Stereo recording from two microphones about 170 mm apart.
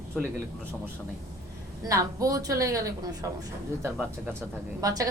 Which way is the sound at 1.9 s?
20° right (ahead or behind).